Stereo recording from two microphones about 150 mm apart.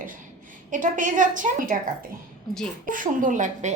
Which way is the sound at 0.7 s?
60° right (ahead or behind).